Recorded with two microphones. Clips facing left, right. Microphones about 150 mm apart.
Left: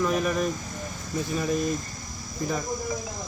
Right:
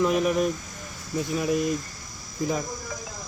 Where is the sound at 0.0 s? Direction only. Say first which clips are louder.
Right 3 dB; 20° right (ahead or behind).